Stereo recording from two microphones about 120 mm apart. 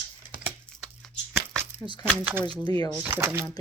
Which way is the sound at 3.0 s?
20° right (ahead or behind).